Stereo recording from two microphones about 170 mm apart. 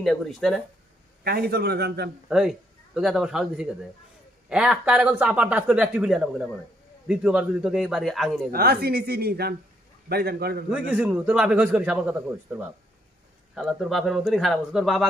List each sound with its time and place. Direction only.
0.0 s speech: centre (ahead or behind)
1.2 s a woman's voice: 65° right (ahead or behind)
2.2 s a man's voice: 5° right (ahead or behind)
8.5 s a woman's voice: 65° right (ahead or behind)
10.7 s a man's voice: 10° right (ahead or behind)